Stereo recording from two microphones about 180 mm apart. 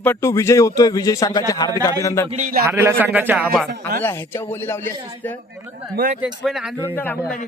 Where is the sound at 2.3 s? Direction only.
45° right (ahead or behind).